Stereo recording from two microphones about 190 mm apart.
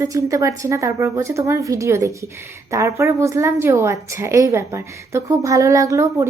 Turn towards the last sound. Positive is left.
turn(degrees=-15)  # may be behind; listen again after turning